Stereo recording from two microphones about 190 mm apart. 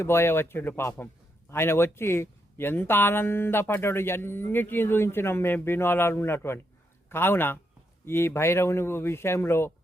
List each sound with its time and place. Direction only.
0.0 s speech: 15° left (ahead or behind)